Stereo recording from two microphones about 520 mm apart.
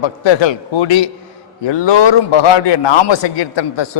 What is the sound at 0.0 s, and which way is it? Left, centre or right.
A man's voice, left.